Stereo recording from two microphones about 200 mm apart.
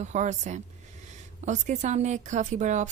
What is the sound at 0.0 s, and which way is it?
Speech, 35° right (ahead or behind).